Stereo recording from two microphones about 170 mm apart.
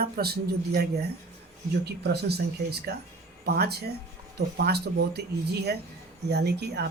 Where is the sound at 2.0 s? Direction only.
75° right (ahead or behind).